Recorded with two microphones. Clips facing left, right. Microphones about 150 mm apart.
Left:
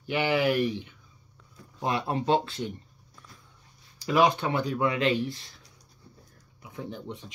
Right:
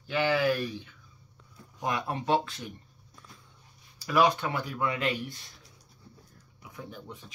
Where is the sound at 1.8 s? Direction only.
30° left (ahead or behind).